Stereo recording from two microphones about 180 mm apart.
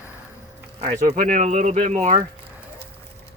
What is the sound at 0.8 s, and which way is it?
Speech, 40° right (ahead or behind).